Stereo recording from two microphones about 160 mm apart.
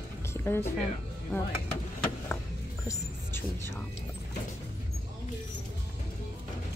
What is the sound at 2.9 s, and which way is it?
Speech, 15° left (ahead or behind).